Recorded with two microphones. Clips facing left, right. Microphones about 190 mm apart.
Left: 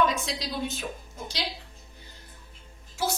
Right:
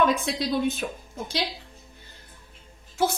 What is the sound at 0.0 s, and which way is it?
A woman's voice, 55° right (ahead or behind).